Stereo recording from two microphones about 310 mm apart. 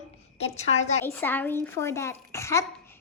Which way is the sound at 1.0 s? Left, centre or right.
Centre.